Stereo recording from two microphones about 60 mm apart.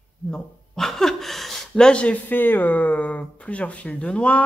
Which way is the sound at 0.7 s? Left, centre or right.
Centre.